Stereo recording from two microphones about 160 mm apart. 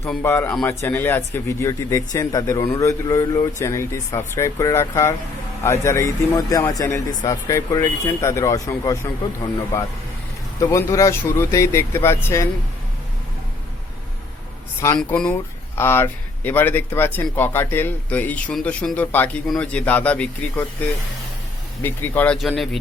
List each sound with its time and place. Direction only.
0.1 s speech: 15° left (ahead or behind)
14.9 s speech: 5° left (ahead or behind)
21.8 s speech: 15° left (ahead or behind)
22.4 s speech: centre (ahead or behind)